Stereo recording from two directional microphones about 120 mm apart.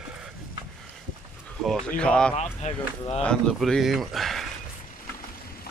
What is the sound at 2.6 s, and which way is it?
Speech, 70° left (ahead or behind).